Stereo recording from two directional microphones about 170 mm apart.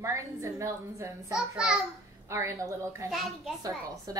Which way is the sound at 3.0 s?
Centre (ahead or behind).